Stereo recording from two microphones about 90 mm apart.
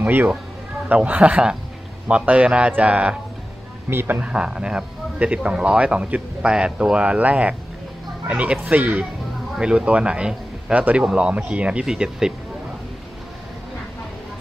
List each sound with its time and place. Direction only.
0.0 s speech: 20° right (ahead or behind)
4.2 s speech: 10° right (ahead or behind)